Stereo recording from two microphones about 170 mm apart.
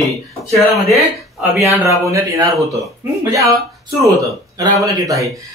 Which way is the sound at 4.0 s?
20° right (ahead or behind).